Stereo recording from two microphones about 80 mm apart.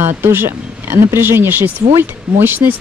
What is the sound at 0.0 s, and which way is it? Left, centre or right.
Speech, right.